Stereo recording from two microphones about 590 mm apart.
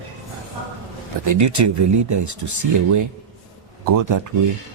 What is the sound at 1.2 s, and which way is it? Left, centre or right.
Speech, right.